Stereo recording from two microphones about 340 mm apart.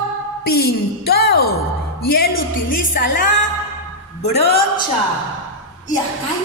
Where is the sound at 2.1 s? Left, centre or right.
Left.